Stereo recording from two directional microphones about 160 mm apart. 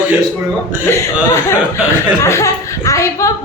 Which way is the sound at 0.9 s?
15° left (ahead or behind).